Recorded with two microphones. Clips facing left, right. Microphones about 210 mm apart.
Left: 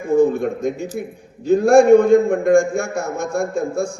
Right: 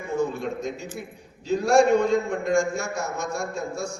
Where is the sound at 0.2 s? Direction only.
55° left (ahead or behind).